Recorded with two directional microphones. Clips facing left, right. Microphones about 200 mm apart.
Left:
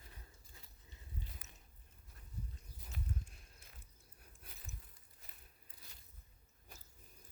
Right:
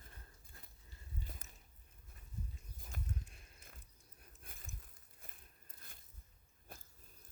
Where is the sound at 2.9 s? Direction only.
45° right (ahead or behind).